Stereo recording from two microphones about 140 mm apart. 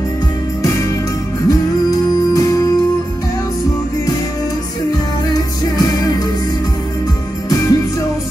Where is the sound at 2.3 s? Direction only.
25° left (ahead or behind).